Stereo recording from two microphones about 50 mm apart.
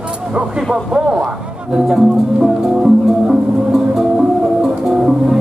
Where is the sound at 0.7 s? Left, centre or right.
Centre.